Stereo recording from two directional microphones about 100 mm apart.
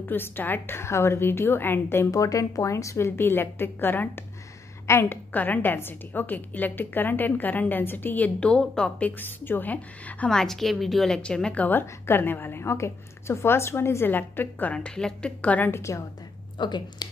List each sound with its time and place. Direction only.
0.0 s a woman's voice: 20° left (ahead or behind)
9.1 s a woman's voice: 20° left (ahead or behind)
16.5 s speech: 50° left (ahead or behind)